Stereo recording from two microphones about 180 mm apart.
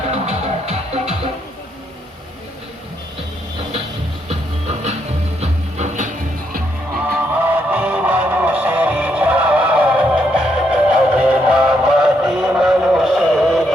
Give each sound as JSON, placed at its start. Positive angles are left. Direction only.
{"t": 0.1, "sound": "music", "side_deg": -35}
{"t": 3.6, "sound": "music", "side_deg": -35}
{"t": 7.3, "sound": "music", "side_deg": -10}